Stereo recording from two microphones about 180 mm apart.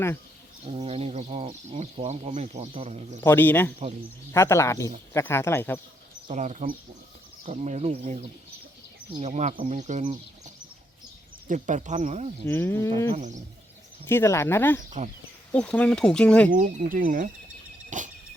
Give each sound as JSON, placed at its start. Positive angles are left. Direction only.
{"t": 0.6, "sound": "speech", "side_deg": -30}
{"t": 3.2, "sound": "speech", "side_deg": 10}
{"t": 6.2, "sound": "speech", "side_deg": -40}
{"t": 12.5, "sound": "speech", "side_deg": 15}
{"t": 13.1, "sound": "speech", "side_deg": -40}
{"t": 14.1, "sound": "speech", "side_deg": 15}
{"t": 15.0, "sound": "speech", "side_deg": -45}
{"t": 15.5, "sound": "speech", "side_deg": 5}
{"t": 16.5, "sound": "speech", "side_deg": -45}
{"t": 17.9, "sound": "vehicle", "side_deg": -45}